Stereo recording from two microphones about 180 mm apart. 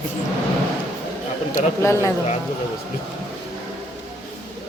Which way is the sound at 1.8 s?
15° left (ahead or behind).